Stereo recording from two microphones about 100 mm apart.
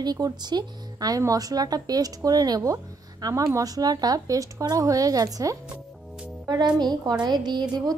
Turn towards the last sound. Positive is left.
turn(degrees=-45)  # may be behind; listen again after turning